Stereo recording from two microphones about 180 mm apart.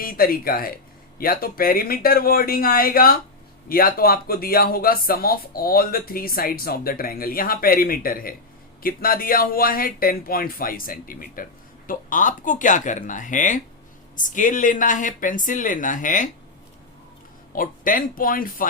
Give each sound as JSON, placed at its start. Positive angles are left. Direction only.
{"t": 0.0, "sound": "speech", "side_deg": 55}
{"t": 17.5, "sound": "speech", "side_deg": 50}